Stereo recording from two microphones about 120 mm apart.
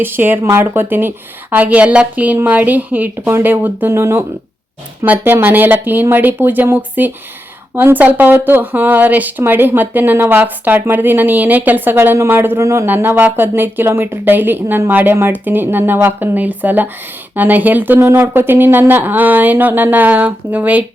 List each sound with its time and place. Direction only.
0.0 s speech: 15° right (ahead or behind)